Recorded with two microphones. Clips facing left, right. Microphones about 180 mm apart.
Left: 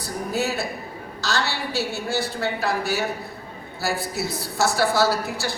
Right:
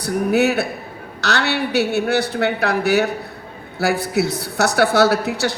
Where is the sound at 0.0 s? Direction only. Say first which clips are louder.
Right 9 dB; 70° right (ahead or behind).